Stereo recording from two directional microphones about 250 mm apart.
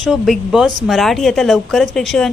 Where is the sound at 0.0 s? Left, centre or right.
Centre.